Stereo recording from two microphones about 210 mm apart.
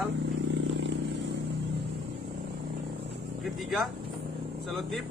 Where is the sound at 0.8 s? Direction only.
60° right (ahead or behind).